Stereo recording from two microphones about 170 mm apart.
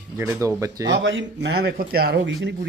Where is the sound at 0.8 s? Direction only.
90° right.